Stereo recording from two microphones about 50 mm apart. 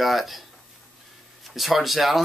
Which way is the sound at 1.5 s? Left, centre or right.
Centre.